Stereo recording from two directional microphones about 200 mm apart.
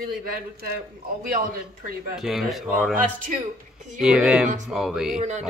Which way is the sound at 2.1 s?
Centre (ahead or behind).